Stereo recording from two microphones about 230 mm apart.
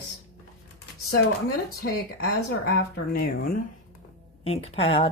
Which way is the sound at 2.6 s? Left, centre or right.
Left.